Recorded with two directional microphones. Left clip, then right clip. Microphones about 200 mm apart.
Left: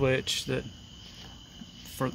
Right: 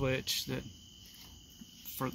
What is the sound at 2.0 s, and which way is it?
Speech, 5° right (ahead or behind).